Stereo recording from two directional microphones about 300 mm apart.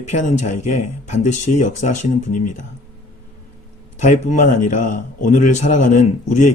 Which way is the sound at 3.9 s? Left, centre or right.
Left.